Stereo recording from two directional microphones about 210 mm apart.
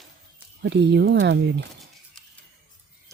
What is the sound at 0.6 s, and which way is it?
Speech, 55° right (ahead or behind).